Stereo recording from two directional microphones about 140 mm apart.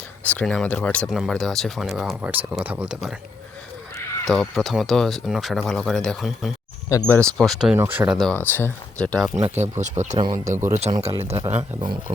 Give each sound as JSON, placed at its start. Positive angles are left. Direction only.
{"t": 0.3, "sound": "speech", "side_deg": 10}
{"t": 1.0, "sound": "speech", "side_deg": 0}
{"t": 4.3, "sound": "speech", "side_deg": 0}
{"t": 7.8, "sound": "speech", "side_deg": -10}
{"t": 8.3, "sound": "speech", "side_deg": 15}
{"t": 9.4, "sound": "speech", "side_deg": -55}
{"t": 10.7, "sound": "a man's voice", "side_deg": -50}
{"t": 11.8, "sound": "speech", "side_deg": -35}